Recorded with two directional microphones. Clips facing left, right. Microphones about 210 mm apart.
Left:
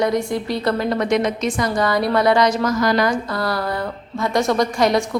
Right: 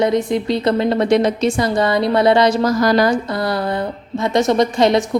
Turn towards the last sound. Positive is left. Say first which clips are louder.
# right 3 dB
turn(degrees=-25)  # may be behind; listen again after turning